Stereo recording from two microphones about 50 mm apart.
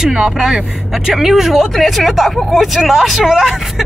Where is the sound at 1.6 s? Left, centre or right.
Centre.